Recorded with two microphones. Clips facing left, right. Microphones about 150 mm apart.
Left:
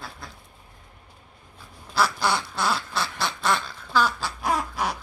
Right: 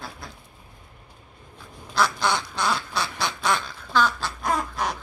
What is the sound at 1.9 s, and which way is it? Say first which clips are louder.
Quack: even; 5° left (ahead or behind).